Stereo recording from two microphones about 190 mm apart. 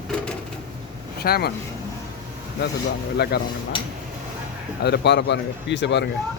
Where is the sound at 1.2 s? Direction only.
55° left (ahead or behind).